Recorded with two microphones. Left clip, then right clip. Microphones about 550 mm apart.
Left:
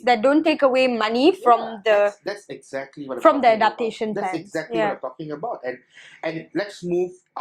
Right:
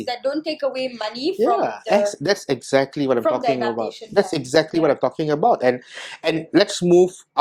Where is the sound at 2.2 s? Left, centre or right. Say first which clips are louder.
Right 10 dB; right.